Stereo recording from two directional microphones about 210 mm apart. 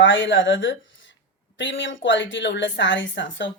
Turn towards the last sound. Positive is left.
turn(degrees=60)  # may be behind; listen again after turning